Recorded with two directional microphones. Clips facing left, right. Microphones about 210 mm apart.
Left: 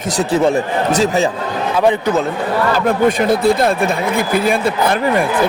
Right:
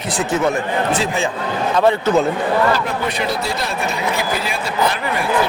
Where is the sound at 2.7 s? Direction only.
50° left (ahead or behind).